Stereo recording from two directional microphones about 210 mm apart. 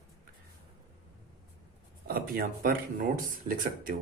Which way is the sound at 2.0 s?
45° right (ahead or behind).